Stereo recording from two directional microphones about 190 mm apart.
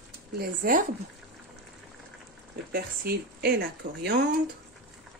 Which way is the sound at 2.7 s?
55° right (ahead or behind).